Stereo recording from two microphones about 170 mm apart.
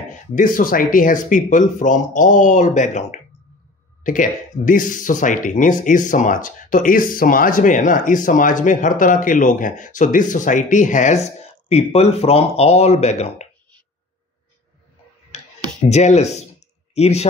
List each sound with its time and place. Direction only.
0.1 s speech: 50° left (ahead or behind)
15.9 s speech: 40° left (ahead or behind)